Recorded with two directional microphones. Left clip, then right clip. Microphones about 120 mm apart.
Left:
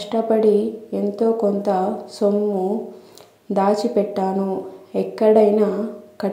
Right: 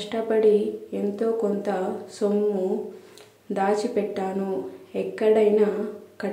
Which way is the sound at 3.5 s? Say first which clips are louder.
Left 5 dB; 25° left (ahead or behind).